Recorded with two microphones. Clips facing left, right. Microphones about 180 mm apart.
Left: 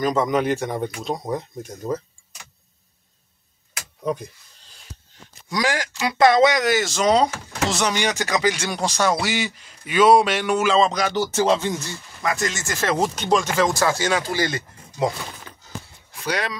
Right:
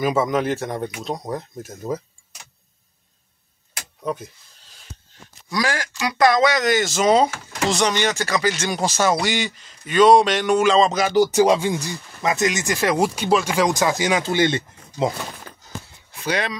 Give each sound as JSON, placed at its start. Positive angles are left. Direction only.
{"t": 0.0, "sound": "speech", "side_deg": -5}
{"t": 4.0, "sound": "speech", "side_deg": 0}
{"t": 5.5, "sound": "speech", "side_deg": 20}
{"t": 6.6, "sound": "speech", "side_deg": 5}
{"t": 8.6, "sound": "speech", "side_deg": -5}
{"t": 16.3, "sound": "speech", "side_deg": 0}